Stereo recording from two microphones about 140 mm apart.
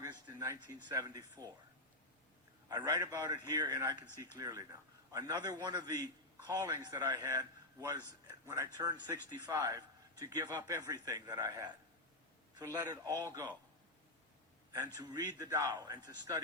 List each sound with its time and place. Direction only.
0.0 s a sound: 25° right (ahead or behind)
0.9 s a man's voice: 25° right (ahead or behind)
2.6 s a man's voice: 25° right (ahead or behind)
15.0 s a man's voice: 30° right (ahead or behind)